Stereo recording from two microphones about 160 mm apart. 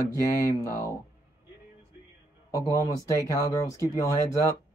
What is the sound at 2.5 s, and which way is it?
Speech, 20° left (ahead or behind).